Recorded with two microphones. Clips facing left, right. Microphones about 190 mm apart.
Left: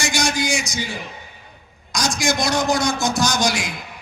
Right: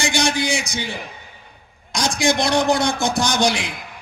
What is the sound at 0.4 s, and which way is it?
Speech, 60° right (ahead or behind).